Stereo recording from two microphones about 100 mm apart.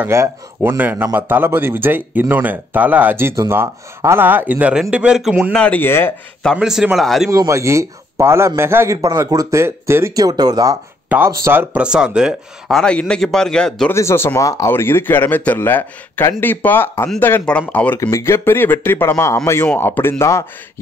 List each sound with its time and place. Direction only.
0.1 s a man's voice: 30° right (ahead or behind); by 5.3 s 10° right (ahead or behind)
5.5 s speech: 10° left (ahead or behind)
5.8 s speech: 20° left (ahead or behind)
6.6 s a man's voice: 5° right (ahead or behind)
7.2 s a man's voice: 30° right (ahead or behind)
10.1 s speech: 40° right (ahead or behind)
11.2 s a man's voice: 25° right (ahead or behind)
11.7 s speech: 10° right (ahead or behind)
12.7 s a man's voice: 10° left (ahead or behind)
13.9 s speech: 25° left (ahead or behind)
18.0 s speech: 30° left (ahead or behind)